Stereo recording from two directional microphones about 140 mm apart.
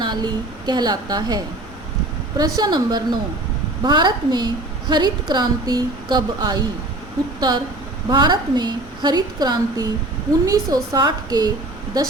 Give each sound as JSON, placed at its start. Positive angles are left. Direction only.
{"t": 0.0, "sound": "a woman's voice", "side_deg": -30}
{"t": 2.4, "sound": "a woman's voice", "side_deg": -30}